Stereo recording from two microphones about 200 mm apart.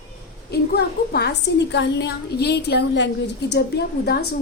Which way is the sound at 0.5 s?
55° left (ahead or behind).